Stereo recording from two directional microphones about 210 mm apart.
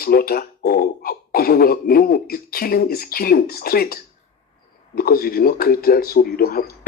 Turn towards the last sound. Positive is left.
turn(degrees=45)  # may be behind; listen again after turning